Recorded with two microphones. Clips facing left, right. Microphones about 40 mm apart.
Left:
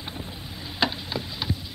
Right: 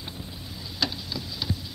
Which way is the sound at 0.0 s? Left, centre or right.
Left.